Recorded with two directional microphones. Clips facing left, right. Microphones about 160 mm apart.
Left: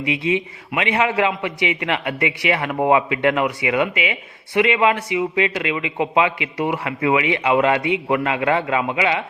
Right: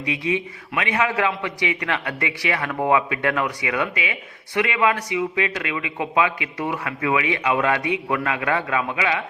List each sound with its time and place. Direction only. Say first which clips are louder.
0.0 s a man's voice: left 3 dB; 20° left (ahead or behind)